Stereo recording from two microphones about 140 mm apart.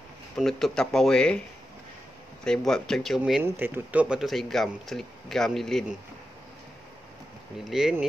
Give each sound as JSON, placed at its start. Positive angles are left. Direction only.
{"t": 0.4, "sound": "speech", "side_deg": 5}
{"t": 2.4, "sound": "speech", "side_deg": 5}
{"t": 3.4, "sound": "speech", "side_deg": -15}